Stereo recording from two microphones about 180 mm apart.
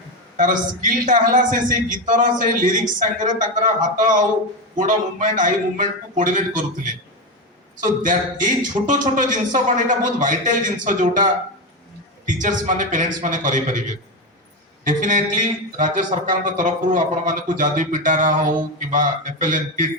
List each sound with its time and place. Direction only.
0.3 s speech: 45° right (ahead or behind)
12.2 s speech: 45° right (ahead or behind)